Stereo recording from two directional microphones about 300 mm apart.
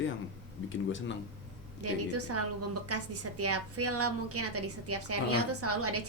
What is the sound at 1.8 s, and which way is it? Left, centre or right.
A woman's voice, right.